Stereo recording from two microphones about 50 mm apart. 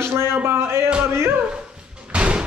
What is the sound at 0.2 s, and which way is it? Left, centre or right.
Speech, right.